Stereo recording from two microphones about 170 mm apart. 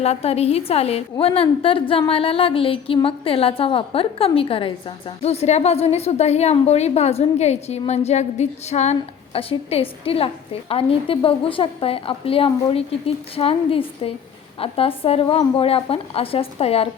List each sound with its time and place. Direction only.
0.0 s a woman's voice: 35° left (ahead or behind)